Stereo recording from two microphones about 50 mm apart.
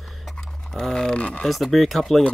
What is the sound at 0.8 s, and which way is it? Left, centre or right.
Speech, centre.